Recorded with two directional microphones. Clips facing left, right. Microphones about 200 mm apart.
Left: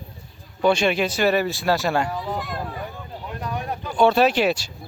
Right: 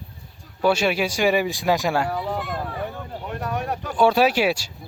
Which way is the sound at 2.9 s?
65° right (ahead or behind).